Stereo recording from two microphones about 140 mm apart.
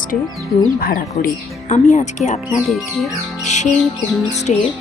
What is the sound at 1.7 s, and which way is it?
Speech, 60° left (ahead or behind).